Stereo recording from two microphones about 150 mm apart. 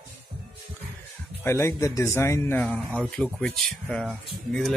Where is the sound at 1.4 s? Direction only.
15° left (ahead or behind).